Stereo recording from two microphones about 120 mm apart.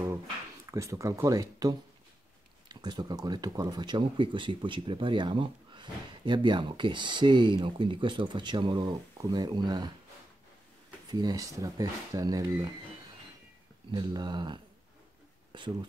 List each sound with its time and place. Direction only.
0.7 s speech: 25° right (ahead or behind)
11.1 s speech: 35° right (ahead or behind)
13.9 s speech: 35° right (ahead or behind)